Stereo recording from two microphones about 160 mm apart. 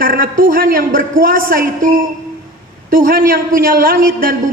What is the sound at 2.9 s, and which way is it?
A man's voice, 60° right (ahead or behind).